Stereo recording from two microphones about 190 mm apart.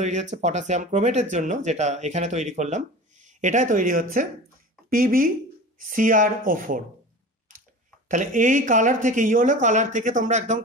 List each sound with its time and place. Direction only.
0.0 s speech: 40° right (ahead or behind)
8.1 s speech: 45° right (ahead or behind)